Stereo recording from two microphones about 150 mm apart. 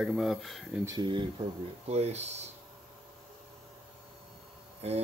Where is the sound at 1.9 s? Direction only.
45° right (ahead or behind).